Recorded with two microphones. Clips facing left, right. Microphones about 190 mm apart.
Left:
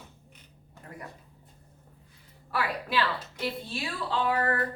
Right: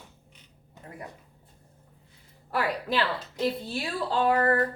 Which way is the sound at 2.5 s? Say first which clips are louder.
Right 2 dB; 40° right (ahead or behind).